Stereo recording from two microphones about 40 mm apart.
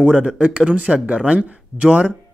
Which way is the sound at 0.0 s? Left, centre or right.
Right.